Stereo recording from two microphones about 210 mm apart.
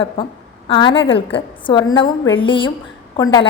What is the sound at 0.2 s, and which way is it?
A woman's voice, 25° left (ahead or behind).